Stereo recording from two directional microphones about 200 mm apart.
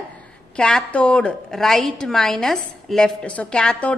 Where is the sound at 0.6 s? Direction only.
5° left (ahead or behind).